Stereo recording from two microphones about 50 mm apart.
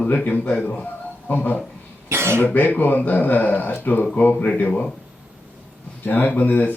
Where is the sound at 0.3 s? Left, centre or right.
Left.